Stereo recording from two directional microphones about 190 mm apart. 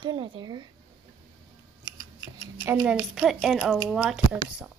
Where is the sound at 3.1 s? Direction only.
Centre (ahead or behind).